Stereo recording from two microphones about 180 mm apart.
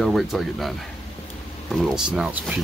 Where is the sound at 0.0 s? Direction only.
Centre (ahead or behind).